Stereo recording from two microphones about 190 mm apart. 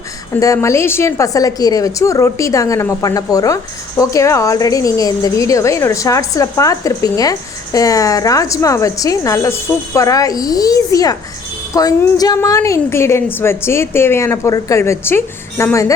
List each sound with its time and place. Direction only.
0.3 s a woman's voice: 15° left (ahead or behind)